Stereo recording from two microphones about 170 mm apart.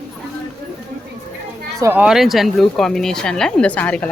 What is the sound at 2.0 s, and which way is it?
A woman's voice, centre (ahead or behind).